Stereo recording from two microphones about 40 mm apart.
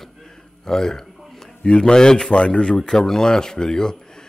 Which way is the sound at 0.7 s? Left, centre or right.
Centre.